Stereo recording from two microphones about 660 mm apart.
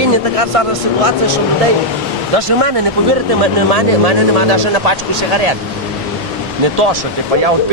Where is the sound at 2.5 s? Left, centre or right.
Right.